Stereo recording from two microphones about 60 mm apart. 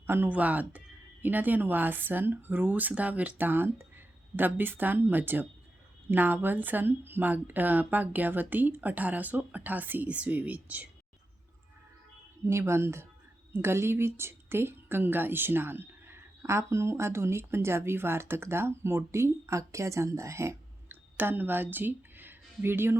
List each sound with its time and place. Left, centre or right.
0.3 s a woman's voice: right
12.5 s a woman's voice: right
20.9 s speech: right